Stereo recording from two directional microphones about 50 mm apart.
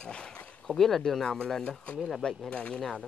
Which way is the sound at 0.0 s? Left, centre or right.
Centre.